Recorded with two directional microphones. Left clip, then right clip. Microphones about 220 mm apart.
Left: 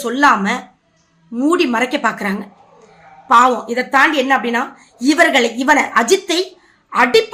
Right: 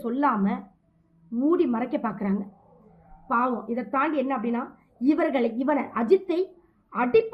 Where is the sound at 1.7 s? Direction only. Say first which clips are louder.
Left 12 dB; 10° left (ahead or behind).